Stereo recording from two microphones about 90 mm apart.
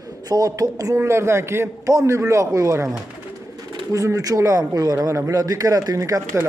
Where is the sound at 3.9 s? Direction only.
35° right (ahead or behind).